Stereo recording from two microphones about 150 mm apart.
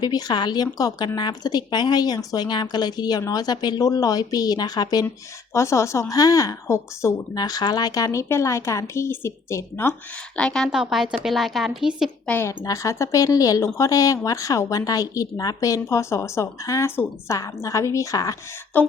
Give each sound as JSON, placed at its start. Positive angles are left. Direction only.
{"t": 0.0, "sound": "speech", "side_deg": 25}
{"t": 10.3, "sound": "a woman's voice", "side_deg": 5}
{"t": 12.3, "sound": "speech", "side_deg": 15}